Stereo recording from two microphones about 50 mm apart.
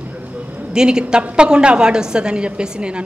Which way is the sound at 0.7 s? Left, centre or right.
Centre.